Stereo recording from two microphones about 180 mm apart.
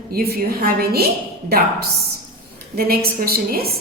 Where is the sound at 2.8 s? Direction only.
55° right (ahead or behind).